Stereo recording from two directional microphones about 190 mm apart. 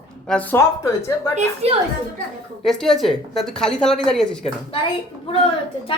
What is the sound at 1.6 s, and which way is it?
Speech, 35° right (ahead or behind).